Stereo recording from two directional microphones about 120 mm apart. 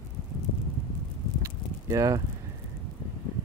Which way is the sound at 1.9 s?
30° right (ahead or behind).